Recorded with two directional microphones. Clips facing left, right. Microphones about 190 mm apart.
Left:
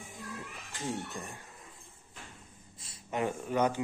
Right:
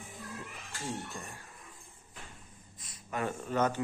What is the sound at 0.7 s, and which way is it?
Music, 20° left (ahead or behind).